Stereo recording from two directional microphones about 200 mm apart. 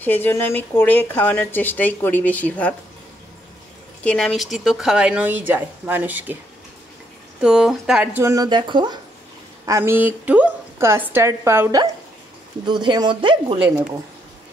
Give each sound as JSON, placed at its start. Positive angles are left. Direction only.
{"t": 0.0, "sound": "speech", "side_deg": 10}
{"t": 4.0, "sound": "a woman's voice", "side_deg": 5}
{"t": 7.4, "sound": "a woman's voice", "side_deg": -5}